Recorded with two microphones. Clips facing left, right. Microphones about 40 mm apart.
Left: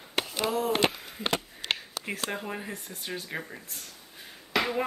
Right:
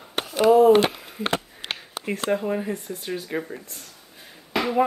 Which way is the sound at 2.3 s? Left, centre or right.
Centre.